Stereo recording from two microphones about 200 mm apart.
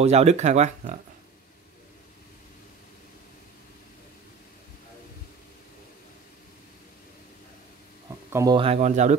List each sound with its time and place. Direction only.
0.0 s speech: 30° right (ahead or behind)
8.3 s speech: 15° right (ahead or behind)
8.5 s speech: 30° right (ahead or behind)